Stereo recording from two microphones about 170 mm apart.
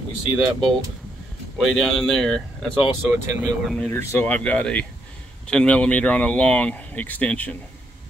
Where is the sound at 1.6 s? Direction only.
Centre (ahead or behind).